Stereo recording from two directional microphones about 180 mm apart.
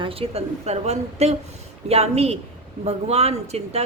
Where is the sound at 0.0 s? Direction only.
30° right (ahead or behind).